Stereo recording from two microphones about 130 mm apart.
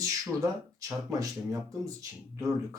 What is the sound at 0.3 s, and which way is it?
Speech, 25° right (ahead or behind).